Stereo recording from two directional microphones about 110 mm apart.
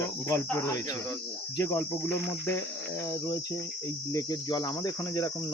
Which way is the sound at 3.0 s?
30° left (ahead or behind).